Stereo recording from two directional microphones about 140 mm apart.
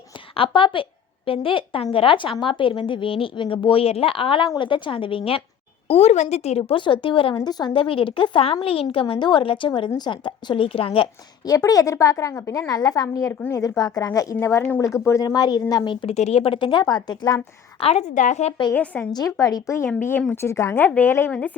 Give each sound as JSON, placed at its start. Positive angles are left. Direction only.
{"t": 0.3, "sound": "a woman's voice", "side_deg": 35}
{"t": 11.5, "sound": "a woman's voice", "side_deg": 25}
{"t": 16.1, "sound": "a woman's voice", "side_deg": 50}
{"t": 17.7, "sound": "a woman's voice", "side_deg": 45}
{"t": 18.7, "sound": "a woman's voice", "side_deg": 10}
{"t": 19.1, "sound": "a woman's voice", "side_deg": 25}